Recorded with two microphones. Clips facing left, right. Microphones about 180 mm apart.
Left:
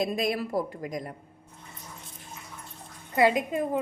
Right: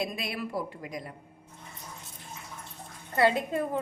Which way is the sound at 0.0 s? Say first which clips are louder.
Left 6 dB; 40° left (ahead or behind).